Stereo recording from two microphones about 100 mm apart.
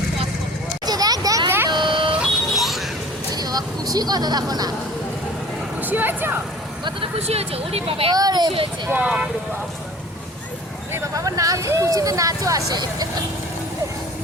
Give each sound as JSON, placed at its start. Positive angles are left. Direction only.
{"t": 0.9, "sound": "a sound", "side_deg": -40}
{"t": 1.5, "sound": "vehicle", "side_deg": -20}
{"t": 1.7, "sound": "vehicle", "side_deg": -50}
{"t": 2.6, "sound": "a sound", "side_deg": 0}
{"t": 3.3, "sound": "a sound", "side_deg": -40}
{"t": 5.8, "sound": "speech", "side_deg": -20}
{"t": 7.2, "sound": "speech", "side_deg": -90}
{"t": 8.1, "sound": "speech", "side_deg": -40}
{"t": 8.9, "sound": "speech", "side_deg": -15}
{"t": 10.9, "sound": "speech", "side_deg": -35}